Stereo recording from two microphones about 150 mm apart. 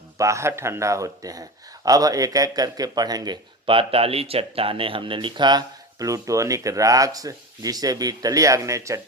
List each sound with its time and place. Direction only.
0.2 s a man's voice: 20° right (ahead or behind)